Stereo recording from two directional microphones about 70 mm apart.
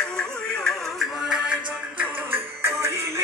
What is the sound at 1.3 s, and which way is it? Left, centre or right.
Music, centre.